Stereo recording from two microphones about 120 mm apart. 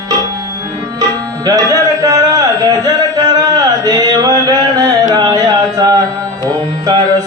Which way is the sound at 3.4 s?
30° right (ahead or behind).